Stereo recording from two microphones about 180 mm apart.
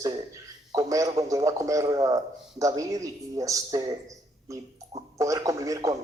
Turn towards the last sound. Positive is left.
turn(degrees=-20)  # may be behind; listen again after turning